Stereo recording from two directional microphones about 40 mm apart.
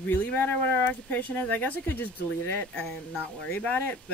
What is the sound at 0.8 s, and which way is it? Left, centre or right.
Speech, left.